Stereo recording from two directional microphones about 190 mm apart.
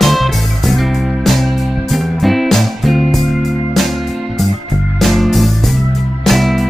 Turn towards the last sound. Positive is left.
turn(degrees=0)  # may be behind; listen again after turning